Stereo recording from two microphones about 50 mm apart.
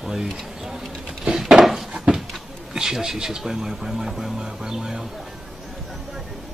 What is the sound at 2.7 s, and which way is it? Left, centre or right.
Speech, centre.